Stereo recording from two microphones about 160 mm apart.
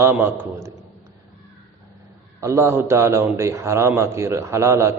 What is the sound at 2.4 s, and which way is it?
A man's voice, 20° right (ahead or behind).